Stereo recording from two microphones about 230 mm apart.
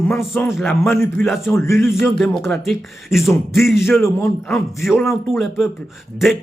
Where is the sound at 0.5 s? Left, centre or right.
Centre.